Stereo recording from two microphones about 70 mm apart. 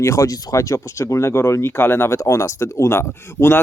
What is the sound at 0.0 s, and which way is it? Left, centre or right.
Speech, left.